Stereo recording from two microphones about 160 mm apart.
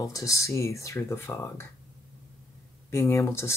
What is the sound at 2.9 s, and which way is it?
Speech, 20° left (ahead or behind).